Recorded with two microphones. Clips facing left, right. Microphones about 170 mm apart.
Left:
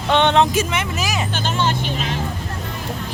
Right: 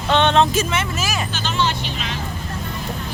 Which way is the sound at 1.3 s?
50° left (ahead or behind).